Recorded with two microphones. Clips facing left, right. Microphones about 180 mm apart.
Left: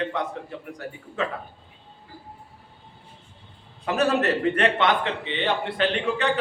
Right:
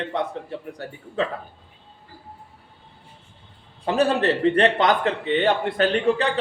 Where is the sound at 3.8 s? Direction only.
30° right (ahead or behind).